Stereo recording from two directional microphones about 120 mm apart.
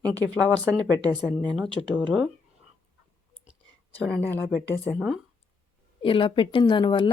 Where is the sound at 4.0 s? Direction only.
5° left (ahead or behind).